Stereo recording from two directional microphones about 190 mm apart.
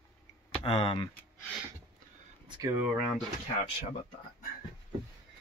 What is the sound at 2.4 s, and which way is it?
Speech, 20° right (ahead or behind).